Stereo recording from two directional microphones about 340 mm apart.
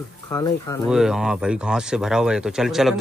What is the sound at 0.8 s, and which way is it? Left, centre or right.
Speech, centre.